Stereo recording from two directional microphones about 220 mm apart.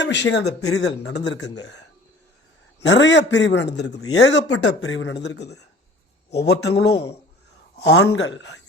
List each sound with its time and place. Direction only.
0.0 s a man's voice: 55° left (ahead or behind)
2.8 s a man's voice: 55° left (ahead or behind)
8.0 s speech: 65° left (ahead or behind)